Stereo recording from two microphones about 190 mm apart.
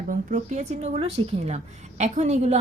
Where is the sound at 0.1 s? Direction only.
45° right (ahead or behind).